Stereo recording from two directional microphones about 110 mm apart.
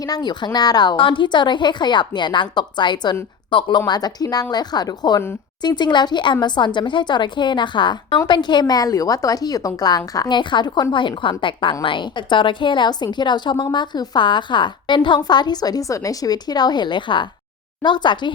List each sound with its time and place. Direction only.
0.0 s a woman's voice: 40° left (ahead or behind)